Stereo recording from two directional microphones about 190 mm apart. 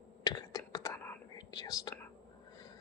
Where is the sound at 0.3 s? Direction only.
20° left (ahead or behind).